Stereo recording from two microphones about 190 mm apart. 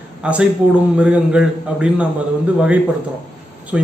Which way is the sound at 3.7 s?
5° right (ahead or behind).